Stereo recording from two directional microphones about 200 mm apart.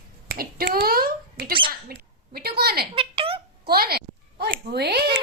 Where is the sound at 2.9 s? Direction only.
25° right (ahead or behind).